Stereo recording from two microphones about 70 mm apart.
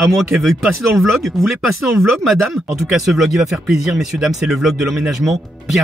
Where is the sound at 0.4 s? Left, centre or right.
Centre.